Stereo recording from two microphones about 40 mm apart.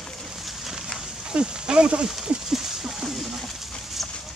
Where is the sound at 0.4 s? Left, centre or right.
Centre.